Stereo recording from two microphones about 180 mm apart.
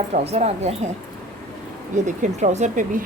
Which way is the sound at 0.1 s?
35° right (ahead or behind).